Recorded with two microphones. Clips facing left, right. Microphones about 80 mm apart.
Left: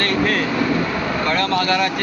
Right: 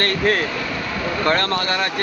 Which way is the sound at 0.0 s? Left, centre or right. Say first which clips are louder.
Even; right.